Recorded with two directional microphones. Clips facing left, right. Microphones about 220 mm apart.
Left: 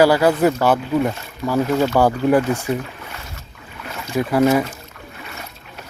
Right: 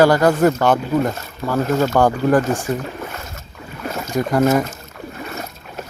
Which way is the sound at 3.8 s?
45° right (ahead or behind).